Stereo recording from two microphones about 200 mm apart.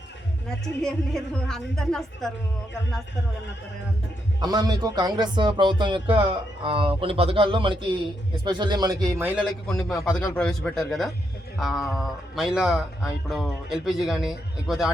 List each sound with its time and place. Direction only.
0.6 s speech: centre (ahead or behind)
4.4 s speech: 20° right (ahead or behind); by 14.9 s centre (ahead or behind)